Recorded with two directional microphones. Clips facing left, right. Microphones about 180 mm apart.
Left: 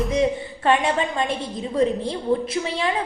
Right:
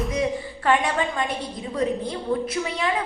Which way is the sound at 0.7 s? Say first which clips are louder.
Left 2 dB; 25° left (ahead or behind).